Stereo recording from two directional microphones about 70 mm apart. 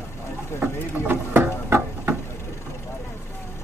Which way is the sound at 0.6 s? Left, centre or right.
Right.